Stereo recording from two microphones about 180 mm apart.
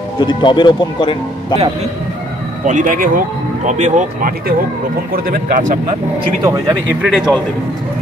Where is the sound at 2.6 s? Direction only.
45° right (ahead or behind).